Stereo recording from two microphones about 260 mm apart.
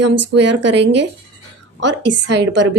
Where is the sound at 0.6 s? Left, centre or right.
Right.